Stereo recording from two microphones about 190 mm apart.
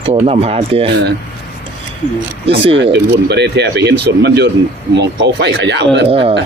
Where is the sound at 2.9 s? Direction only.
60° right (ahead or behind).